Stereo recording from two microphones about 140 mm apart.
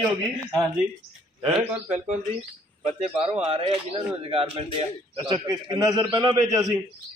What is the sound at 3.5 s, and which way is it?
A man's voice, 40° right (ahead or behind).